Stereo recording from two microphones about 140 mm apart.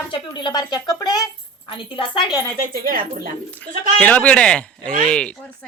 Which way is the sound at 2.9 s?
90° right.